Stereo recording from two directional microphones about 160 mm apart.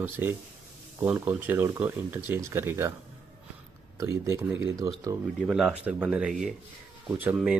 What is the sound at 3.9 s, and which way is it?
Speech, 20° right (ahead or behind).